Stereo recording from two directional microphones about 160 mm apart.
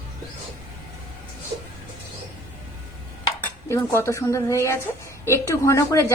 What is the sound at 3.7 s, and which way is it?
A woman's voice, 15° left (ahead or behind).